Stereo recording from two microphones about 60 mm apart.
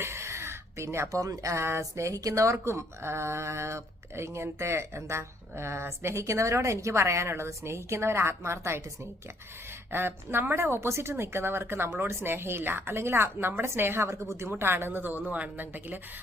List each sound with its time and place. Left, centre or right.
0.0 s a sound: right
1.2 s speech: right
1.5 s speech: right
1.8 s speech: right
9.9 s a woman's voice: right